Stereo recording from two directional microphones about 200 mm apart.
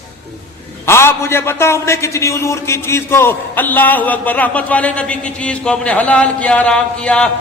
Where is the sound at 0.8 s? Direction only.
10° left (ahead or behind).